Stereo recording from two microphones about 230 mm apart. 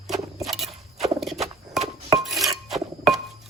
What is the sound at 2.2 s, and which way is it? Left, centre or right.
Dishes, centre.